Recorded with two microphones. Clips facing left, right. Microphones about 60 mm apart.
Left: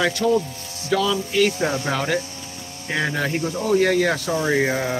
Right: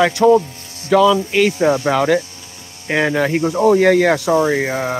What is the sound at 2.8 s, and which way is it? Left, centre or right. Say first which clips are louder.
Speech: right 7 dB; right.